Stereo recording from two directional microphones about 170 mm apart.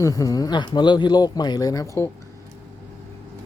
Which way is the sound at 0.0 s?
20° left (ahead or behind).